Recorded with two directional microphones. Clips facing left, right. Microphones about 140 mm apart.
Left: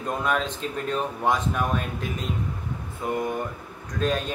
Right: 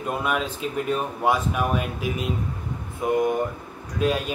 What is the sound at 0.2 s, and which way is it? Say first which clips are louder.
Speech: even; 10° right (ahead or behind).